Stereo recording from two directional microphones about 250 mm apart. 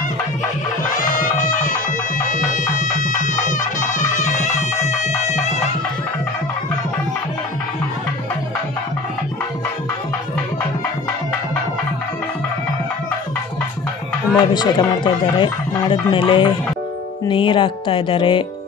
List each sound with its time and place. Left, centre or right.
1.4 s music: left
14.3 s a man's voice: centre